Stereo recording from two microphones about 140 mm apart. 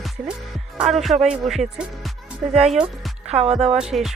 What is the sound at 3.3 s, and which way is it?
Speech, 45° right (ahead or behind).